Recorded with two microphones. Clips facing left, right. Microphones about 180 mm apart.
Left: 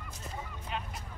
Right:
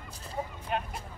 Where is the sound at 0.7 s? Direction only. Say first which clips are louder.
Right 6 dB; 55° right (ahead or behind).